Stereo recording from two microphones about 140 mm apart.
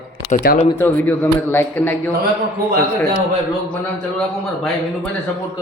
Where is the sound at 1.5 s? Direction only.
15° left (ahead or behind).